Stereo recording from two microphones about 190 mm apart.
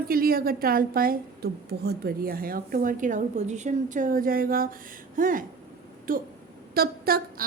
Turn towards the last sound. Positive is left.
turn(degrees=-55)  # may be behind; listen again after turning